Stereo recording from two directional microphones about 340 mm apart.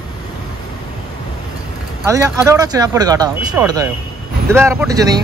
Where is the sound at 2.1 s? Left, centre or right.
Centre.